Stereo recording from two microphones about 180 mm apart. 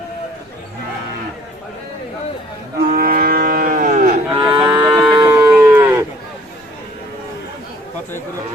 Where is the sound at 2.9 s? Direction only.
55° right (ahead or behind).